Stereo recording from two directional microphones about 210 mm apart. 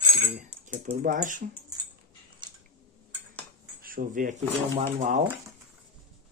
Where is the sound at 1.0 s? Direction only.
40° right (ahead or behind).